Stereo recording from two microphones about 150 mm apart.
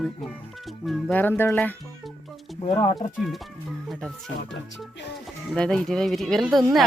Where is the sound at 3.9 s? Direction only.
Centre (ahead or behind).